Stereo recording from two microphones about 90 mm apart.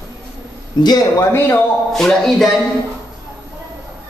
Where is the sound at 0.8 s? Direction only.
55° left (ahead or behind).